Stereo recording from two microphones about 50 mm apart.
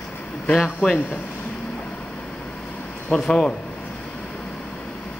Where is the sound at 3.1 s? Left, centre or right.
Left.